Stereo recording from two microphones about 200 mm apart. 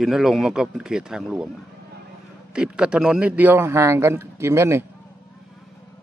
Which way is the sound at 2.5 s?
5° right (ahead or behind).